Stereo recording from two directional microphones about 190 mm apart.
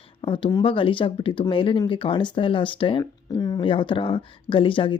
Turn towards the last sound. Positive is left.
turn(degrees=25)  # may be behind; listen again after turning